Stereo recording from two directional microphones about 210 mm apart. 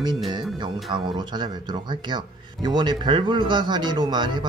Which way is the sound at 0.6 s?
20° right (ahead or behind).